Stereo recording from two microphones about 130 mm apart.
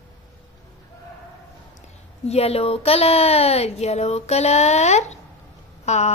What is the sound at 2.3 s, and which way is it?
A woman's voice, 55° left (ahead or behind).